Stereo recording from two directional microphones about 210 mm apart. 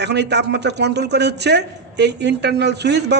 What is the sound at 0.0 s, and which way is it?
A man's voice, 55° right (ahead or behind).